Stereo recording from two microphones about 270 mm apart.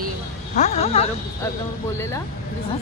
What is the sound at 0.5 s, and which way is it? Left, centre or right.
Speech, left.